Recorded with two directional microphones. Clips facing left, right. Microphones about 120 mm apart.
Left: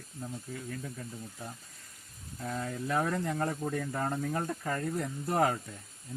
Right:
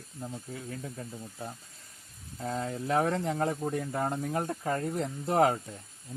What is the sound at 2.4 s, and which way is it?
Speech, 25° right (ahead or behind).